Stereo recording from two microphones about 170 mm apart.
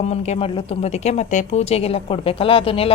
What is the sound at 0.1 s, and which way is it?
A woman's voice, 35° left (ahead or behind).